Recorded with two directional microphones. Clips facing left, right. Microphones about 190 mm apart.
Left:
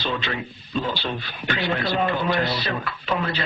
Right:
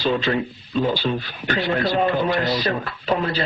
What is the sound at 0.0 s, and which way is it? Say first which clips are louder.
Speech: right 7 dB; 40° right (ahead or behind).